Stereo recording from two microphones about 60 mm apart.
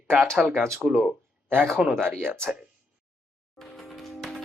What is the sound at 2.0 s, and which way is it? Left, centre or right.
Speech, right.